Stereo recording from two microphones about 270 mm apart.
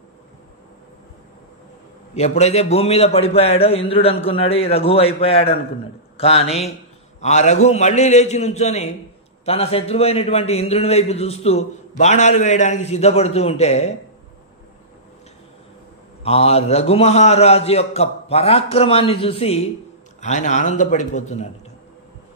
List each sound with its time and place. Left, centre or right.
2.1 s a man's voice: left
16.3 s a man's voice: left